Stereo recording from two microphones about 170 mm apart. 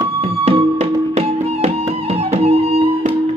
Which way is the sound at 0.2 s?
35° right (ahead or behind).